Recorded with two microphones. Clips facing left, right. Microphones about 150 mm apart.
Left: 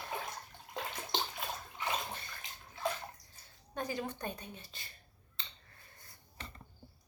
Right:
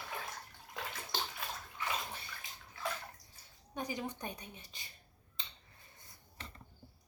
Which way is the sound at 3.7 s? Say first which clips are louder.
Left 2 dB; 15° right (ahead or behind).